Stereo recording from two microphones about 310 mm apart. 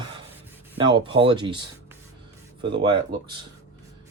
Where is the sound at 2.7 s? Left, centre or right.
Centre.